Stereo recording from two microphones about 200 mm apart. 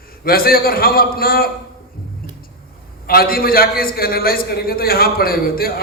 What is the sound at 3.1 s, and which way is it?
A man's voice, 50° left (ahead or behind).